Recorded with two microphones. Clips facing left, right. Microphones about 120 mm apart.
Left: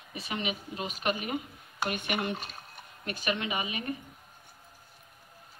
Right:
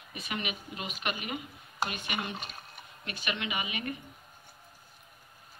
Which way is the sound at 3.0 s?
40° left (ahead or behind).